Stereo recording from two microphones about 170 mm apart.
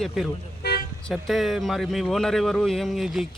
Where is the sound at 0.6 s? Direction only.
75° left (ahead or behind).